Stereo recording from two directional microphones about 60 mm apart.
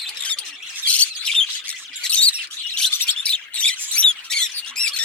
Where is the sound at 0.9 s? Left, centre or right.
Left.